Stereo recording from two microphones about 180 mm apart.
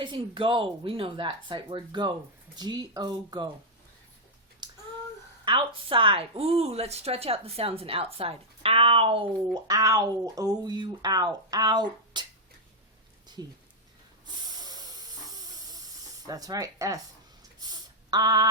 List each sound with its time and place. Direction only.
0.0 s speech: 25° right (ahead or behind)
4.6 s a sound: 25° right (ahead or behind)
5.5 s a woman's voice: 30° right (ahead or behind)
9.6 s speech: 20° right (ahead or behind)
14.3 s hiss: 20° right (ahead or behind)
16.2 s speech: 20° right (ahead or behind)
17.6 s a sound: 20° right (ahead or behind)